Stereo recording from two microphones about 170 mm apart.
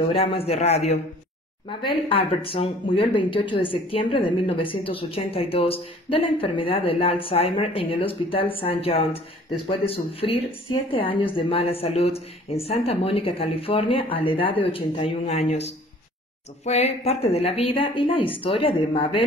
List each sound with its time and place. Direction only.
0.1 s speech: 35° left (ahead or behind)
1.7 s speech: 30° left (ahead or behind)
16.6 s speech: 40° left (ahead or behind)